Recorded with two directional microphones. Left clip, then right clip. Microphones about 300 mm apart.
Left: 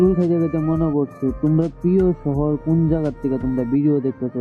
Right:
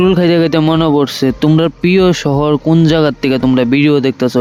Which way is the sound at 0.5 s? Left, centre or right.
Right.